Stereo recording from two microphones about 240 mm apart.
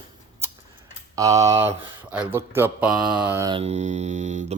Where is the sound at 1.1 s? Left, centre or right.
Centre.